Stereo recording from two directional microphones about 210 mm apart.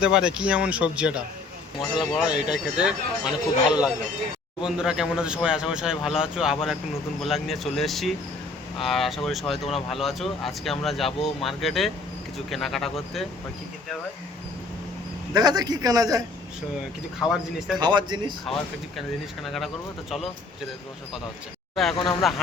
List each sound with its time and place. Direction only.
0.0 s speech: 5° right (ahead or behind)
15.3 s a man's voice: 20° right (ahead or behind)
17.7 s speech: 20° right (ahead or behind)
18.9 s speech: centre (ahead or behind)
21.9 s speech: 20° left (ahead or behind)